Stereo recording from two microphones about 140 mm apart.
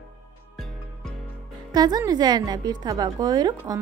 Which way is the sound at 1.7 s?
30° right (ahead or behind).